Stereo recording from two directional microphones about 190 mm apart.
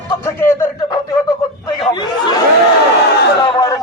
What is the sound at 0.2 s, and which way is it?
Speech, 15° left (ahead or behind).